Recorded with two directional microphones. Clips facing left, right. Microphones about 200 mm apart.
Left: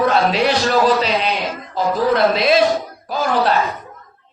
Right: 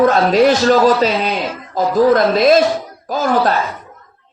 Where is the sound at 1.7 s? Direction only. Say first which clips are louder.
Right 5 dB; 45° right (ahead or behind).